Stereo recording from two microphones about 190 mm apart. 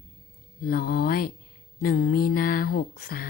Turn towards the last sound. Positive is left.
turn(degrees=50)  # may be behind; listen again after turning